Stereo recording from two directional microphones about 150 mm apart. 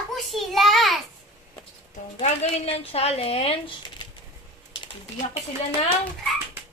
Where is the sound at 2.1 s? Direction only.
45° left (ahead or behind).